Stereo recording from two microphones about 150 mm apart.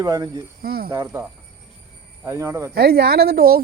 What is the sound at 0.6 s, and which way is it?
Speech, 85° right.